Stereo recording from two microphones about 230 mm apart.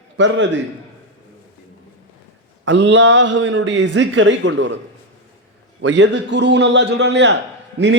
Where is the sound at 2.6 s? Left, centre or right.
Right.